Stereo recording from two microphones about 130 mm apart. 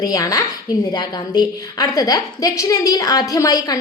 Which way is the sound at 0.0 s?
30° left (ahead or behind).